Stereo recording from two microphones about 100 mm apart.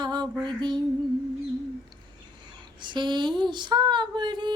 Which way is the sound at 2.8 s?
50° right (ahead or behind).